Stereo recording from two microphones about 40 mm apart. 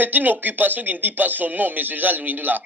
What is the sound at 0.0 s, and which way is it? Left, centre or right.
Speech, right.